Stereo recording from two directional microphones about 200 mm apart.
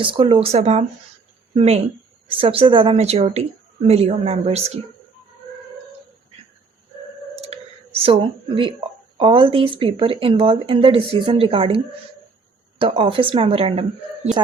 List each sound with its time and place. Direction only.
0.0 s speech: 25° right (ahead or behind)
7.4 s a sound: 30° right (ahead or behind)
9.1 s speech: 25° right (ahead or behind)
12.8 s speech: 25° right (ahead or behind)